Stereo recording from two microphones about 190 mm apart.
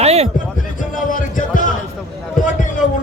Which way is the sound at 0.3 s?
45° left (ahead or behind).